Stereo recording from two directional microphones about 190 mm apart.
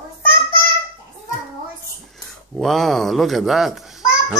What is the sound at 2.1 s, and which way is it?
Speech, centre (ahead or behind).